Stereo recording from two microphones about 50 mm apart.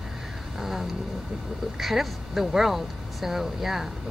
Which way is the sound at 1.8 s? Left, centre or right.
Centre.